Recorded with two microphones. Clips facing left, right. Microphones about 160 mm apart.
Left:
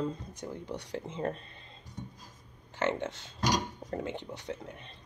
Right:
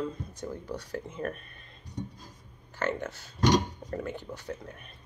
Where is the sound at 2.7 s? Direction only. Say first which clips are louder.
Left 1 dB; 20° left (ahead or behind).